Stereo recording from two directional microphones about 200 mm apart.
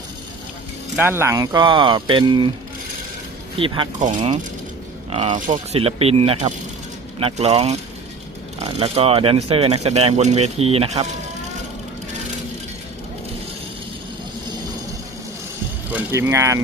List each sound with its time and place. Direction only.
0.9 s speech: 10° right (ahead or behind)
3.6 s speech: 25° right (ahead or behind)
5.1 s speech: 30° right (ahead or behind)
15.9 s speech: 10° right (ahead or behind)